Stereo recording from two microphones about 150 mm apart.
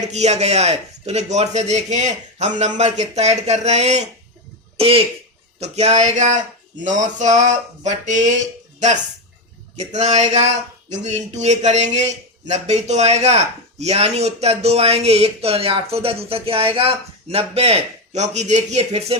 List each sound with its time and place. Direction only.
0.0 s speech: 45° right (ahead or behind)
4.8 s speech: 40° right (ahead or behind)
9.7 s speech: 50° right (ahead or behind)